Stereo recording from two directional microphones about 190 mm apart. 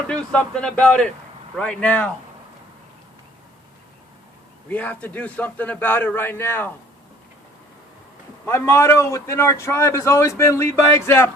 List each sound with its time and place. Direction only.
0.1 s speech: 5° left (ahead or behind)
4.7 s a man's voice: 10° left (ahead or behind)
8.4 s a man's voice: 15° left (ahead or behind)